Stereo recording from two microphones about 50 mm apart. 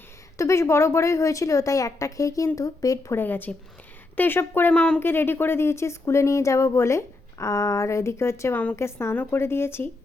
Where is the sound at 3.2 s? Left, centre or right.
Left.